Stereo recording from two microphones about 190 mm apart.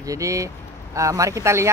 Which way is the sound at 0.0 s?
15° right (ahead or behind).